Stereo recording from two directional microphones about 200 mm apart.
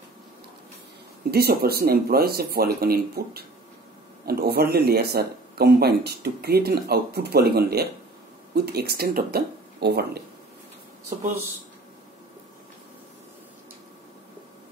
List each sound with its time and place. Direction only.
1.3 s speech: 50° right (ahead or behind)